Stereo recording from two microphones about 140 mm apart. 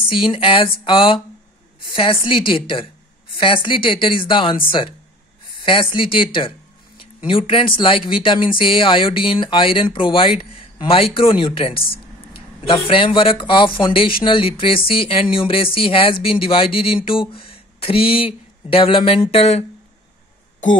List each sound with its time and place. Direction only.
0.1 s speech: 40° left (ahead or behind)
5.7 s speech: 40° left (ahead or behind)